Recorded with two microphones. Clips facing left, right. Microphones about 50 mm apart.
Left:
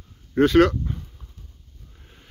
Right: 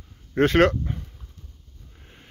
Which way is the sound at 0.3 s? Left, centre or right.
Right.